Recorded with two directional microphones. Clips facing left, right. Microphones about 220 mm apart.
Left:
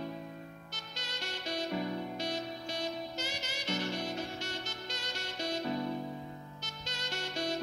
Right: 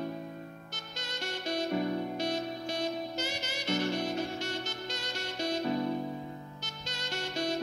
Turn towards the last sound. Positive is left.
turn(degrees=-55)  # may be behind; listen again after turning